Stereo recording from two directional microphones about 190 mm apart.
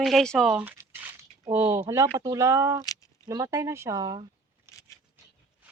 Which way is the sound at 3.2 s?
15° right (ahead or behind).